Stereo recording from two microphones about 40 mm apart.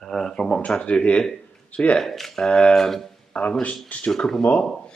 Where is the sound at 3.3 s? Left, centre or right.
Left.